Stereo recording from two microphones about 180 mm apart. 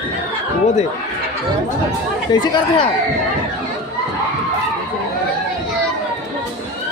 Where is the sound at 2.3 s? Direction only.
20° left (ahead or behind).